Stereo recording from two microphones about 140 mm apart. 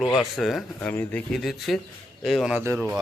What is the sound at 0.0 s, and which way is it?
Speech, centre (ahead or behind).